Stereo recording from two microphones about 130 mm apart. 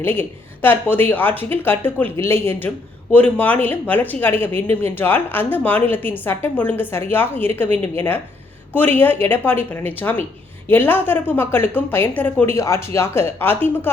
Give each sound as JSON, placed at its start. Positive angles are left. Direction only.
{"t": 0.0, "sound": "a woman's voice", "side_deg": 15}